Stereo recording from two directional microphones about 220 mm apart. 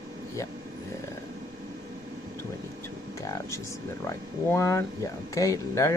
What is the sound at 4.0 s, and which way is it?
Speech, 10° left (ahead or behind).